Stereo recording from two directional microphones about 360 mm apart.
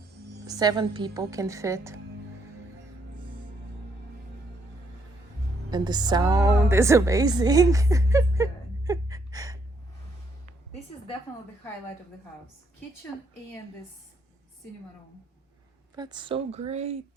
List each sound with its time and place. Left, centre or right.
0.4 s speech: centre
5.7 s a woman's voice: centre
16.0 s speech: centre